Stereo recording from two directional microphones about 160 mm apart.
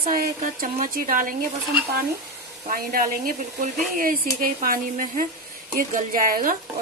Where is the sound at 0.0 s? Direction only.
65° right (ahead or behind).